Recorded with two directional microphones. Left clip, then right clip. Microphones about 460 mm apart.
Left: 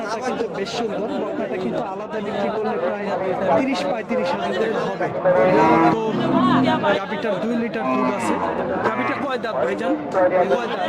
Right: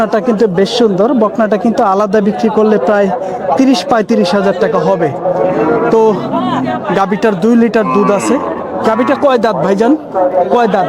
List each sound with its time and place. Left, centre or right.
3.7 s speech: right
7.0 s speech: right
9.0 s speech: right